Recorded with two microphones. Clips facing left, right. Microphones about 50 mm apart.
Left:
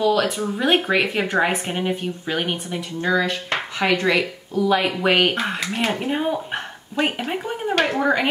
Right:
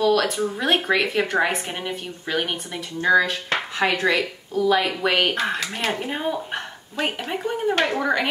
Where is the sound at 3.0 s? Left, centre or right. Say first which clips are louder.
Right 3 dB; centre.